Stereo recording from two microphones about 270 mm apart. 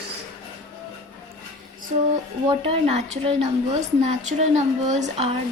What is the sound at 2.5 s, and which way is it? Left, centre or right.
A woman's voice, right.